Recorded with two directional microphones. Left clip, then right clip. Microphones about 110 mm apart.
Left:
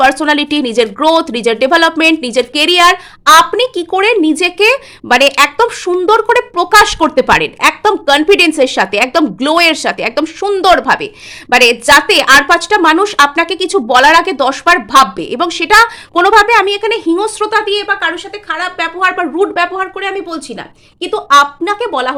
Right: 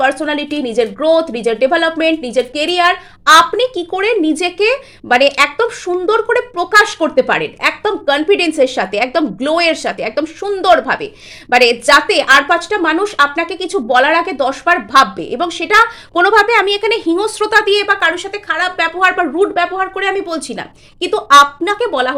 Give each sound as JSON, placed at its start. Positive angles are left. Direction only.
{"t": 0.0, "sound": "speech", "side_deg": 55}
{"t": 11.5, "sound": "speech", "side_deg": 30}
{"t": 16.2, "sound": "speech", "side_deg": 25}
{"t": 17.4, "sound": "speech", "side_deg": -10}
{"t": 17.7, "sound": "a woman's voice", "side_deg": -25}
{"t": 18.4, "sound": "speech", "side_deg": -15}
{"t": 18.9, "sound": "speech", "side_deg": 0}
{"t": 19.4, "sound": "speech", "side_deg": 15}
{"t": 20.0, "sound": "speech", "side_deg": -10}